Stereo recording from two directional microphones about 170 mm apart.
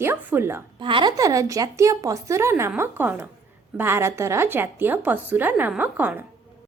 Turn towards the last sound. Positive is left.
turn(degrees=-10)  # may be behind; listen again after turning